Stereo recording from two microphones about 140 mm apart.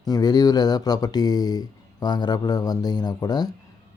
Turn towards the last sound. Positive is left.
turn(degrees=30)  # may be behind; listen again after turning